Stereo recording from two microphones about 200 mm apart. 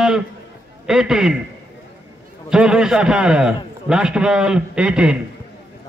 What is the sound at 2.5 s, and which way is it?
A man's voice, 5° right (ahead or behind).